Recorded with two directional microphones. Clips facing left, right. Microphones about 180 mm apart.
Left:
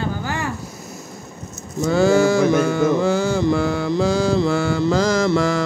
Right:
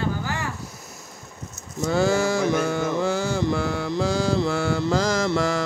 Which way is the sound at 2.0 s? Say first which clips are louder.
Left 6 dB; 90° left.